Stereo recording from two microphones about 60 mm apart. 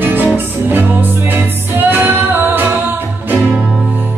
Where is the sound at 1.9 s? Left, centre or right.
Right.